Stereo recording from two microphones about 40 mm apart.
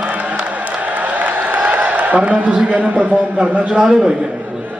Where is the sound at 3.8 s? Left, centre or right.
Centre.